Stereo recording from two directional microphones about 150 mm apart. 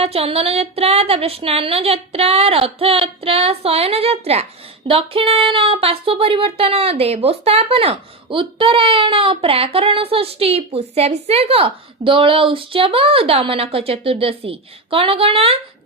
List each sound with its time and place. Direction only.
0.0 s speech: 40° right (ahead or behind)